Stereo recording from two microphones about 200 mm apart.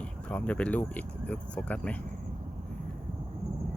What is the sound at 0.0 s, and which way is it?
Speech, 5° left (ahead or behind).